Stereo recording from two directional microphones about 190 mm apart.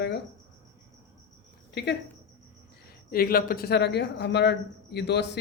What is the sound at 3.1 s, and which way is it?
Speech, 50° left (ahead or behind).